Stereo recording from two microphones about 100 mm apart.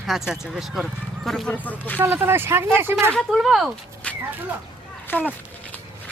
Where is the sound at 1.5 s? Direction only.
15° left (ahead or behind).